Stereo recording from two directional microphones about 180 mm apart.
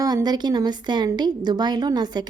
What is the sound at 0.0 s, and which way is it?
Speech, 20° right (ahead or behind).